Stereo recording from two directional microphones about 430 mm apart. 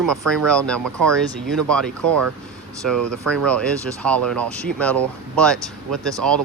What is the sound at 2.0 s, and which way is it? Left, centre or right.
Speech, right.